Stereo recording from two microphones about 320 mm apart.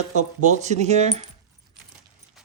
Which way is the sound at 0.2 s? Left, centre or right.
Right.